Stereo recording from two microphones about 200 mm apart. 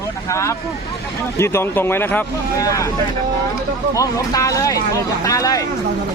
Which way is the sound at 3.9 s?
15° left (ahead or behind).